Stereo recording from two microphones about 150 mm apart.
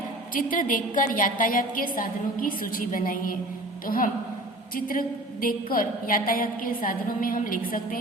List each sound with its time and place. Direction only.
0.3 s a woman's voice: 65° left (ahead or behind)